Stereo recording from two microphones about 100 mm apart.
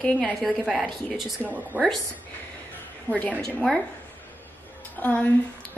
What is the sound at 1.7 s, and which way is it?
Speech, 15° right (ahead or behind).